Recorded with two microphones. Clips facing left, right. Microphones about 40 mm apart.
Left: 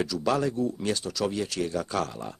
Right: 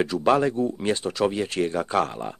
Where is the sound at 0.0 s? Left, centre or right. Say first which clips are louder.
Right 6 dB; right.